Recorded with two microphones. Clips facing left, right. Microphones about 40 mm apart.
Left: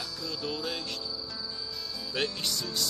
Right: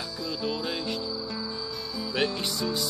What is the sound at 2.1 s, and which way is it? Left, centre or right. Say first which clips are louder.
Music: right 4 dB; centre.